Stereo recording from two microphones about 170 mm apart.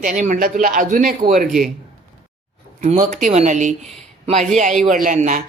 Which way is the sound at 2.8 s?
45° right (ahead or behind).